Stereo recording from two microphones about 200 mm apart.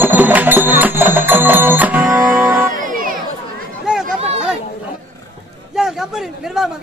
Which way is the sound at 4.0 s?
30° right (ahead or behind).